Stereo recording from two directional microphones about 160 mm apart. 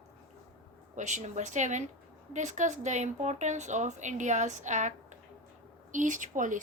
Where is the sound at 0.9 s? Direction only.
50° right (ahead or behind).